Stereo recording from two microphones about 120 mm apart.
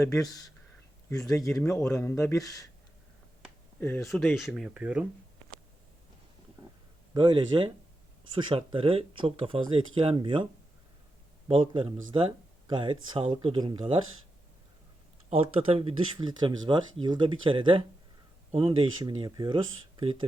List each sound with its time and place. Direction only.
1.1 s speech: 5° left (ahead or behind)
1.4 s speech: 25° left (ahead or behind)
1.6 s speech: 5° left (ahead or behind)
2.1 s speech: 25° left (ahead or behind)
3.8 s speech: 20° left (ahead or behind)
4.0 s speech: centre (ahead or behind)
7.1 s speech: 40° right (ahead or behind)
11.4 s speech: 45° right (ahead or behind)
15.3 s speech: 55° right (ahead or behind)
16.1 s speech: 35° right (ahead or behind)